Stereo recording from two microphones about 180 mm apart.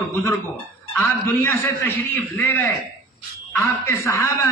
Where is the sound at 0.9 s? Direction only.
10° left (ahead or behind).